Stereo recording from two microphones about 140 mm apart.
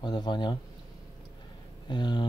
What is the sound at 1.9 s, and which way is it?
Speech, 30° left (ahead or behind).